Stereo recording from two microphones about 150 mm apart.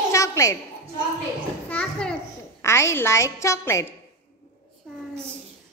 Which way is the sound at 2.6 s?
20° left (ahead or behind).